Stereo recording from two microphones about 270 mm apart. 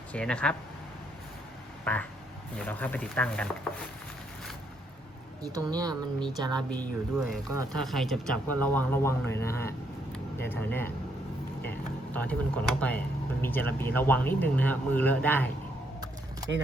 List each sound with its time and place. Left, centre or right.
0.1 s speech: centre
1.8 s quack: centre
2.6 s speech: centre
5.5 s speech: centre
6.7 s a man's voice: centre